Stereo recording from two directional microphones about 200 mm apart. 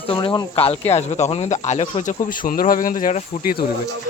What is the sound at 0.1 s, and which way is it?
Speech, 25° left (ahead or behind).